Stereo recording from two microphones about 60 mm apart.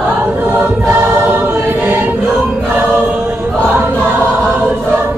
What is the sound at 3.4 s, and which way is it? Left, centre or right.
Choir, right.